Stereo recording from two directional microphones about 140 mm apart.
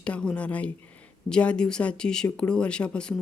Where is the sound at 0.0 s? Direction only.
5° left (ahead or behind).